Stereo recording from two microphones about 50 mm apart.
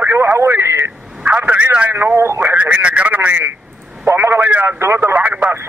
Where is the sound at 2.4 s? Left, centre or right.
Right.